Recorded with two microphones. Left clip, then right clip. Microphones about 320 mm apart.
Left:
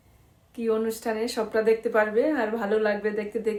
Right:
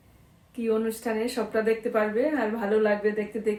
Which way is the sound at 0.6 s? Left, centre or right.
Centre.